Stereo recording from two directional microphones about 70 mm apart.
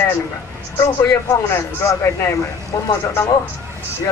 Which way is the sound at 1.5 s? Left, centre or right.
Left.